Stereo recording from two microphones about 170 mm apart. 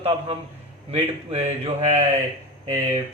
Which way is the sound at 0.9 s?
35° right (ahead or behind).